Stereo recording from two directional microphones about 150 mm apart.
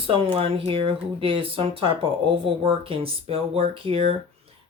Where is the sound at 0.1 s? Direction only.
40° right (ahead or behind).